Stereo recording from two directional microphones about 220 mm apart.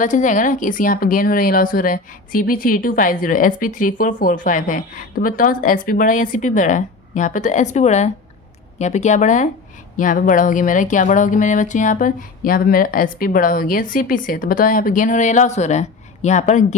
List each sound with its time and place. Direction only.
0.0 s speech: 35° left (ahead or behind)